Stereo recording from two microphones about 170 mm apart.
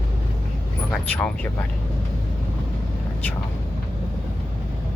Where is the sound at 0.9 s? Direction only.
5° left (ahead or behind).